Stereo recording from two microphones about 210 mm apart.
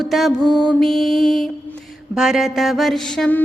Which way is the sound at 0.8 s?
Centre (ahead or behind).